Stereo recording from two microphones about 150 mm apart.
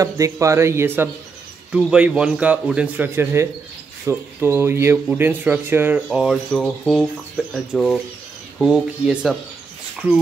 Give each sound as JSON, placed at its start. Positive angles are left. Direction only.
{"t": 0.0, "sound": "a man's voice", "side_deg": -20}
{"t": 6.0, "sound": "speech", "side_deg": 0}